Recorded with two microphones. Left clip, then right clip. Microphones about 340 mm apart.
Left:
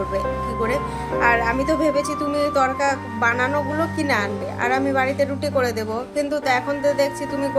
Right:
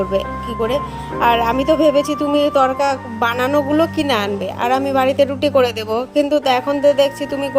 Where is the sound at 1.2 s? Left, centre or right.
Right.